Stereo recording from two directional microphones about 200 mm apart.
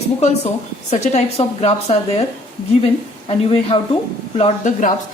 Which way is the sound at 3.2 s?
30° left (ahead or behind).